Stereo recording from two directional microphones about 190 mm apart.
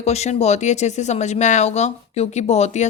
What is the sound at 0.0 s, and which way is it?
Speech, 35° left (ahead or behind).